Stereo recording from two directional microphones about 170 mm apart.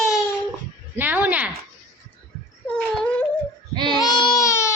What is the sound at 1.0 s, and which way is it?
Speech, 10° right (ahead or behind).